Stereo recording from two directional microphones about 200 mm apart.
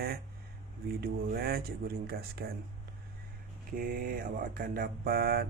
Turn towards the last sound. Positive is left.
turn(degrees=-50)  # may be behind; listen again after turning